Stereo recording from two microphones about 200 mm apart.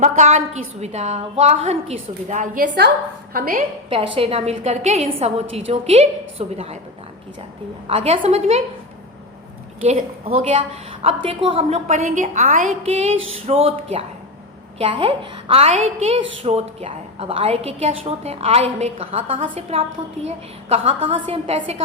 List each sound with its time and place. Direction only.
0.0 s a woman's voice: 35° right (ahead or behind)
3.8 s a woman's voice: 25° right (ahead or behind)
7.9 s a woman's voice: 30° right (ahead or behind)
9.8 s a woman's voice: 30° right (ahead or behind)